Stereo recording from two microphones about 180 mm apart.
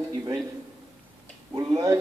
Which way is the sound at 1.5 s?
20° right (ahead or behind).